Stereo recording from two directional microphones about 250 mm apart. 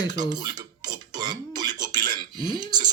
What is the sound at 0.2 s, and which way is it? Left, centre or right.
Cutlery, centre.